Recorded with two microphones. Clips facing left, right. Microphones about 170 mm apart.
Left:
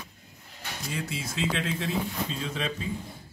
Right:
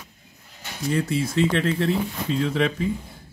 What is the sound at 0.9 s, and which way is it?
Speech, 60° right (ahead or behind).